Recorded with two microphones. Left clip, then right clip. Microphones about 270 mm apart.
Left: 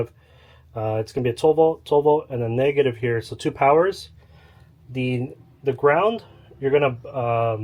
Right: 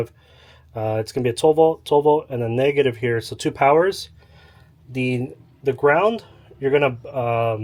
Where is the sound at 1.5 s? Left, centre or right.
Right.